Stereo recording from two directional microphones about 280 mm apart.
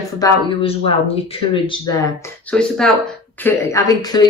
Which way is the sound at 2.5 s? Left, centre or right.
Centre.